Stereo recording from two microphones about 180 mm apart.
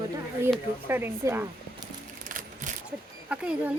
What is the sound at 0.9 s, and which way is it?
Speech, 10° right (ahead or behind).